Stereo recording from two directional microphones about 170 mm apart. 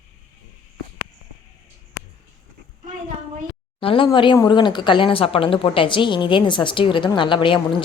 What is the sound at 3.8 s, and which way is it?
A woman's voice, 30° left (ahead or behind).